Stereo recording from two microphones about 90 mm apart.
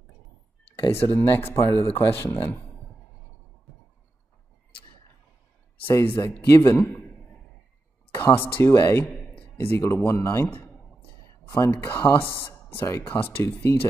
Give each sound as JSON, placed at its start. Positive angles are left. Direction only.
{"t": 0.8, "sound": "speech", "side_deg": 35}
{"t": 1.1, "sound": "speech", "side_deg": 20}
{"t": 5.8, "sound": "speech", "side_deg": 25}
{"t": 6.8, "sound": "a sound", "side_deg": 10}
{"t": 8.2, "sound": "speech", "side_deg": 20}
{"t": 9.3, "sound": "a sound", "side_deg": 15}
{"t": 9.9, "sound": "speech", "side_deg": 20}
{"t": 12.8, "sound": "speech", "side_deg": 30}